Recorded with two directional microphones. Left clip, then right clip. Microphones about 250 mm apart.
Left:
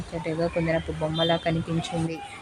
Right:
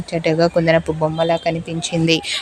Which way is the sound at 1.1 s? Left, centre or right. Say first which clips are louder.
Right 4 dB; centre.